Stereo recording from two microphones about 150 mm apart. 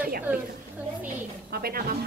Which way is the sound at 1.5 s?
90° right.